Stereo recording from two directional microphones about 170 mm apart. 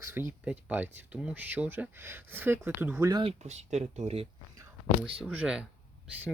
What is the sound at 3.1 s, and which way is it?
Speech, 25° right (ahead or behind).